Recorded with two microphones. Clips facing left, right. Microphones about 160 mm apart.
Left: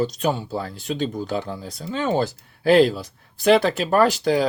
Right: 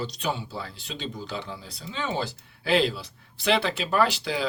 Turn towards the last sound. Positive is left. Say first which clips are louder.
# left 7 dB
turn(degrees=45)  # may be behind; listen again after turning